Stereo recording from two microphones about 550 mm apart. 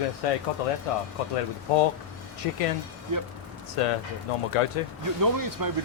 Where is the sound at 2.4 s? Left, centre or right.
Left.